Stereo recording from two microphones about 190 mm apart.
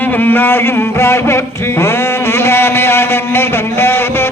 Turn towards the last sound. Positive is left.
turn(degrees=10)  # may be behind; listen again after turning